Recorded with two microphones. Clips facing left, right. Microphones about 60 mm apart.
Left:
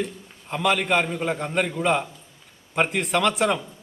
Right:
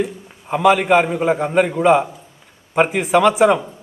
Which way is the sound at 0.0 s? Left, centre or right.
Centre.